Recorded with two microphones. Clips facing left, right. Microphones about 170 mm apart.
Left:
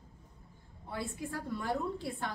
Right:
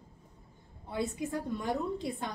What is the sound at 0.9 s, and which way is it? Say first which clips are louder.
A woman's voice: right 5 dB; 20° right (ahead or behind).